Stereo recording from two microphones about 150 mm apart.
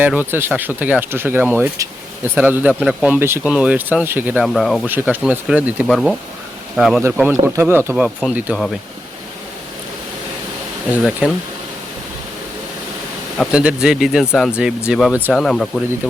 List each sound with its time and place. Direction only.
0.0 s speech: 10° right (ahead or behind)
4.4 s speech: centre (ahead or behind)
4.9 s speech: 15° right (ahead or behind)
5.9 s speech: 5° left (ahead or behind)
7.4 s speech: 15° right (ahead or behind)
8.2 s speech: centre (ahead or behind)
10.9 s speech: 5° right (ahead or behind)
13.5 s speech: 5° right (ahead or behind)